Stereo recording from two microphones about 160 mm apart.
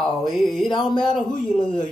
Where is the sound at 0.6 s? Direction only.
30° left (ahead or behind).